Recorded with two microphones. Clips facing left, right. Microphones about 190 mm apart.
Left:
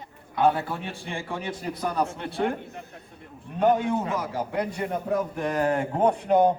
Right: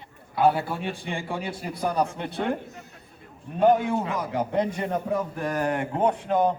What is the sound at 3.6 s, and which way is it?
Speech, 10° right (ahead or behind).